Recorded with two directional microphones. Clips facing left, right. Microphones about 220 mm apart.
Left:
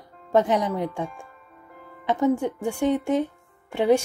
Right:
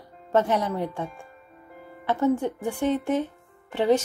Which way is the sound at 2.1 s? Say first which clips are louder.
Left 1 dB; 15° left (ahead or behind).